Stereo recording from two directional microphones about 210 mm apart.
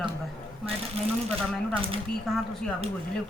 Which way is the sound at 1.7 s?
25° right (ahead or behind).